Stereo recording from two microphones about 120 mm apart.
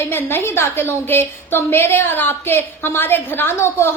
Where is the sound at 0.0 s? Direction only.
20° left (ahead or behind).